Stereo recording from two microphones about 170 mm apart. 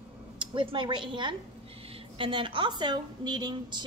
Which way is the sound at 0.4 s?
30° right (ahead or behind).